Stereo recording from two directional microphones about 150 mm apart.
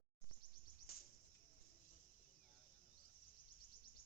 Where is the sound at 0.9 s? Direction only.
85° left.